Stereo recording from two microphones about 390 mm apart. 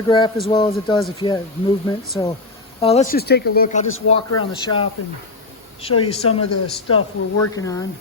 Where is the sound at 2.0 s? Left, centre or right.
Centre.